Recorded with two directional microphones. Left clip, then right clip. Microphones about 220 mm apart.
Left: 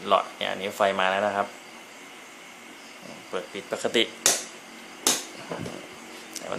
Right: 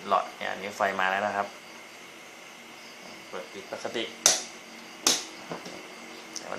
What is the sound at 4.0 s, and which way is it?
Speech, 45° left (ahead or behind).